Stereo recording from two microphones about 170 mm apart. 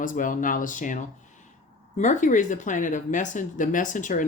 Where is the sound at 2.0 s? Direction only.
45° left (ahead or behind).